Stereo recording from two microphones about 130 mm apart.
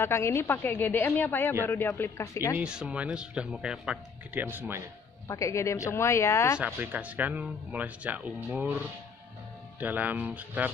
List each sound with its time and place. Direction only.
0.0 s a woman's voice: 20° left (ahead or behind)
2.5 s speech: 5° right (ahead or behind)
5.3 s speech: 25° left (ahead or behind)
6.6 s speech: 10° right (ahead or behind)
9.8 s speech: 10° right (ahead or behind)